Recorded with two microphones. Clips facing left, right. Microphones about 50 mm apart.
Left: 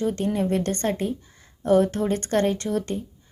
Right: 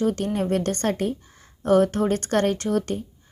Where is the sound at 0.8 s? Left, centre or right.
Right.